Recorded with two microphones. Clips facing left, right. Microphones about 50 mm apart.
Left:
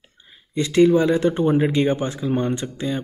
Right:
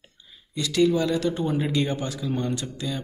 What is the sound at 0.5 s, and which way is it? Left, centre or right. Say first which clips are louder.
Speech: left 6 dB; left.